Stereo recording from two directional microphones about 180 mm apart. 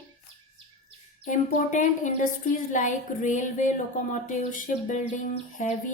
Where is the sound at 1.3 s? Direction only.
45° left (ahead or behind).